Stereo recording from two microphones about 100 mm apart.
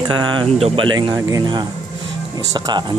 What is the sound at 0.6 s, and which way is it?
Speech, 90° right.